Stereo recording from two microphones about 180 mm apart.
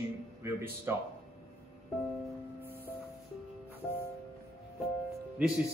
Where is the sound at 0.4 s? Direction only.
15° right (ahead or behind).